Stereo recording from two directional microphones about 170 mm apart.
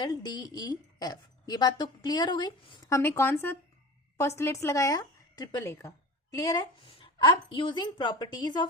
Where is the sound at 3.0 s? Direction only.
15° left (ahead or behind).